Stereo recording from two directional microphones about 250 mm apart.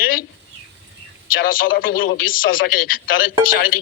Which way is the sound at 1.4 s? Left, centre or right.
Left.